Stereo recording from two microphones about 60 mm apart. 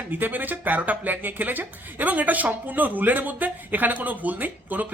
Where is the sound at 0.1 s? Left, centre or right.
Right.